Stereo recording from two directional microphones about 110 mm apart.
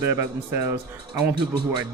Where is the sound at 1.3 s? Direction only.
45° right (ahead or behind).